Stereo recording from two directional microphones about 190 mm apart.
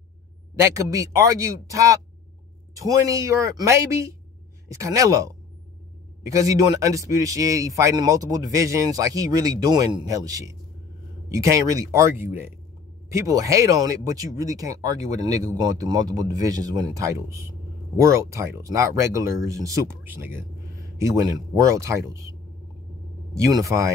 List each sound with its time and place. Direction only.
0.6 s speech: 15° right (ahead or behind)
23.4 s speech: 15° right (ahead or behind)